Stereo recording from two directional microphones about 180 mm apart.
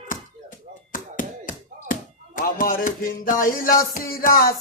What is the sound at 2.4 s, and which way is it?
Music, 50° left (ahead or behind).